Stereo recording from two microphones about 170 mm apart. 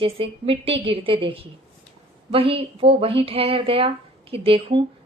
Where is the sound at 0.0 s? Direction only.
30° right (ahead or behind).